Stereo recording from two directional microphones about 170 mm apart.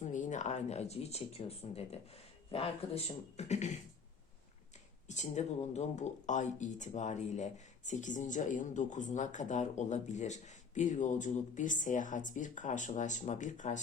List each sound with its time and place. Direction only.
0.0 s speech: 45° left (ahead or behind)
5.0 s speech: 45° left (ahead or behind)